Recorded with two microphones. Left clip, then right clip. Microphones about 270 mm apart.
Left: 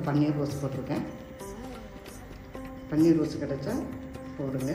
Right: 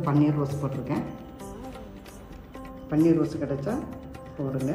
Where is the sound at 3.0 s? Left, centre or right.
Centre.